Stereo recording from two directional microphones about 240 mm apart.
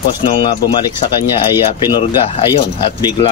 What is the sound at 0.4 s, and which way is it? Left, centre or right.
Speech, centre.